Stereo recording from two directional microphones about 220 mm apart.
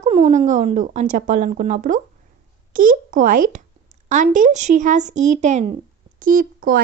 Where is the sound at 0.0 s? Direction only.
30° right (ahead or behind).